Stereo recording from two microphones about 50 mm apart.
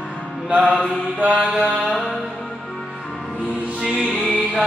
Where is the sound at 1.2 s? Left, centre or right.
Right.